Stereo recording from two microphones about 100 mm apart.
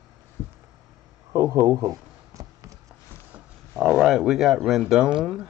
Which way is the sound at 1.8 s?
35° right (ahead or behind).